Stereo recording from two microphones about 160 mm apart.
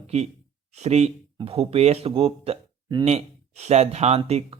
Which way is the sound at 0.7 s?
45° right (ahead or behind).